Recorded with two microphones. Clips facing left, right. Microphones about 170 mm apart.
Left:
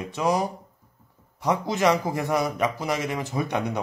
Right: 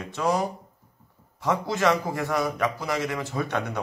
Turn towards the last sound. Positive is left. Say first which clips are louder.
# left 2 dB
turn(degrees=15)  # may be behind; listen again after turning